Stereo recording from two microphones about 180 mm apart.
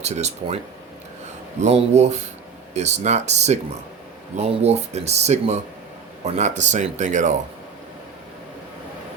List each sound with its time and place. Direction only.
0.0 s speech: 40° right (ahead or behind)
1.6 s speech: 40° right (ahead or behind)